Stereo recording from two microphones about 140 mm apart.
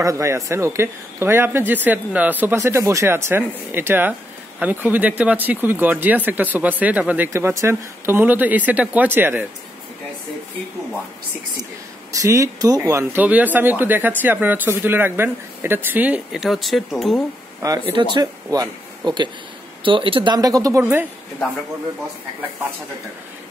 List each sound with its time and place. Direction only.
0.0 s speech: 20° right (ahead or behind)
12.1 s speech: 25° right (ahead or behind); by 17.2 s centre (ahead or behind)
17.6 s speech: 20° right (ahead or behind); by 20.3 s 40° right (ahead or behind)
20.3 s speech: 25° right (ahead or behind)